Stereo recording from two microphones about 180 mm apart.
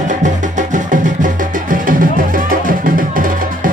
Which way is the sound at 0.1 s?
45° right (ahead or behind).